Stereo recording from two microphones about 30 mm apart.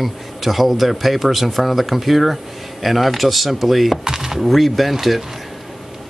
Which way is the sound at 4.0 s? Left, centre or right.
Centre.